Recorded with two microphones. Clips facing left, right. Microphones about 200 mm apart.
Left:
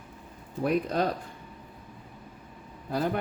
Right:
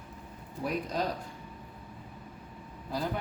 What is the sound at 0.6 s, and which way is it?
Speech, 60° left (ahead or behind).